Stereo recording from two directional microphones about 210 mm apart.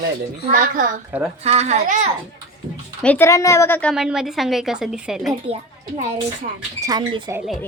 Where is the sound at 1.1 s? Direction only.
5° right (ahead or behind).